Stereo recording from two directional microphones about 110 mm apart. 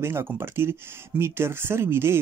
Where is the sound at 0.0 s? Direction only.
20° right (ahead or behind).